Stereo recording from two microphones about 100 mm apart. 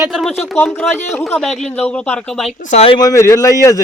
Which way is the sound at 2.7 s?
75° left (ahead or behind).